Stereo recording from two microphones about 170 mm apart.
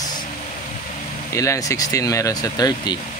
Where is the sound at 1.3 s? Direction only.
20° left (ahead or behind).